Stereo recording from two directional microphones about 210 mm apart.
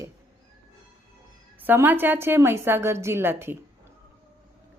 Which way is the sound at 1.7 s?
10° right (ahead or behind).